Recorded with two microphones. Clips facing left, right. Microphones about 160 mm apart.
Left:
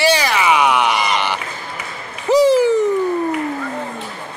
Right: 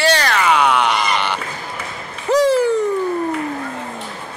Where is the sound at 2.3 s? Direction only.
10° left (ahead or behind).